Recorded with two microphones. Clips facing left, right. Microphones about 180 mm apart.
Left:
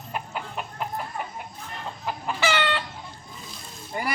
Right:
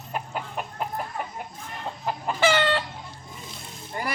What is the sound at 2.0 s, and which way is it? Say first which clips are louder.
Chicken: right 4 dB; 50° right (ahead or behind).